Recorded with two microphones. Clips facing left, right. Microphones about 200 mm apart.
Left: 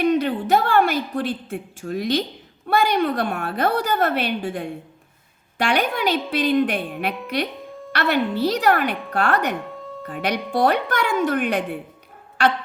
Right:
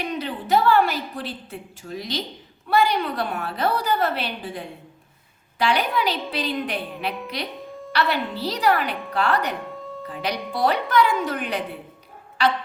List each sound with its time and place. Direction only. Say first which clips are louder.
0.1 s a woman's voice: left 4 dB; 50° left (ahead or behind)